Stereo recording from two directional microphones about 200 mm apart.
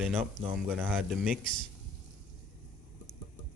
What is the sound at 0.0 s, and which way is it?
Speech, 5° right (ahead or behind).